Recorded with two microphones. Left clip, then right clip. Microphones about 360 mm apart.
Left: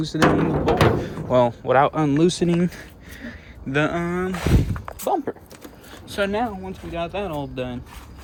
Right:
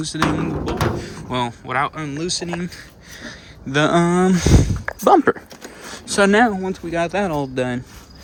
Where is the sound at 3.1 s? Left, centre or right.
Centre.